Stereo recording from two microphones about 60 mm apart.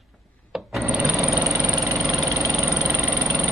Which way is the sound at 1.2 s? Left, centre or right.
Right.